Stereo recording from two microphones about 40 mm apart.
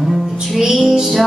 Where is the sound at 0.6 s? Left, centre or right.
Centre.